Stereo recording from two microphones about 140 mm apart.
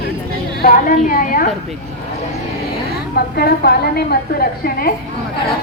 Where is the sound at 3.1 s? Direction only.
90° left.